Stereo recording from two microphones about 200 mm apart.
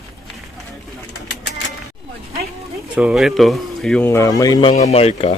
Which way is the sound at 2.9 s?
5° right (ahead or behind).